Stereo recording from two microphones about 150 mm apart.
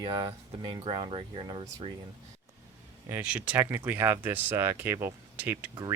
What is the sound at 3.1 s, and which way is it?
Speech, 10° right (ahead or behind).